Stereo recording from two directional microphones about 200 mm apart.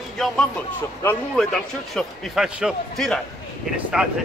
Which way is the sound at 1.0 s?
5° left (ahead or behind).